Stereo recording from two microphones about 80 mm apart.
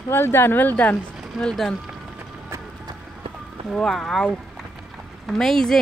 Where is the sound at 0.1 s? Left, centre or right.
Left.